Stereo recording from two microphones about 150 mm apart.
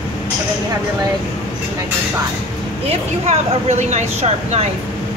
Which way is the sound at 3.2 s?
45° right (ahead or behind).